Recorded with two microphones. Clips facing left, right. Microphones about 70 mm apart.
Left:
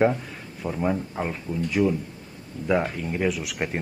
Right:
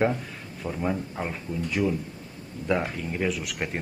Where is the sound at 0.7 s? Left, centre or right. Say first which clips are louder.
Left 3 dB; centre.